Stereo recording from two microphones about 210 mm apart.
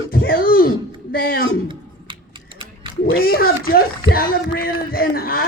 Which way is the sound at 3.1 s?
45° left (ahead or behind).